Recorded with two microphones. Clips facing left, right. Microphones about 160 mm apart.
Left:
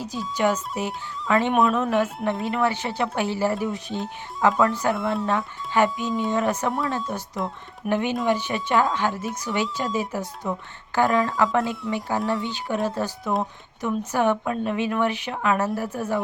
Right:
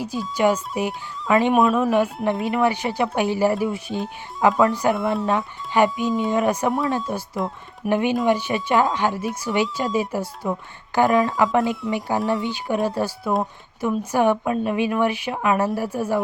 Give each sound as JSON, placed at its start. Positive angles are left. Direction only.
{"t": 0.0, "sound": "a woman's voice", "side_deg": -10}
{"t": 6.1, "sound": "speech", "side_deg": 0}
{"t": 6.3, "sound": "a woman's voice", "side_deg": -10}
{"t": 7.1, "sound": "speech", "side_deg": 0}
{"t": 7.9, "sound": "a woman's voice", "side_deg": -10}